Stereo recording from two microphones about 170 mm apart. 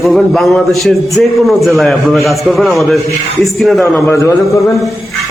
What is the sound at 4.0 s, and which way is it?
Speech, 15° left (ahead or behind).